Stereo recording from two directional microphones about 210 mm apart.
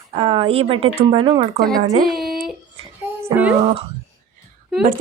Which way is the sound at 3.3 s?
20° right (ahead or behind).